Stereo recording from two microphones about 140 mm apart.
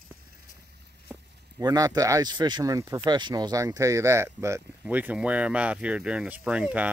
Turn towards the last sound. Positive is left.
turn(degrees=-10)  # may be behind; listen again after turning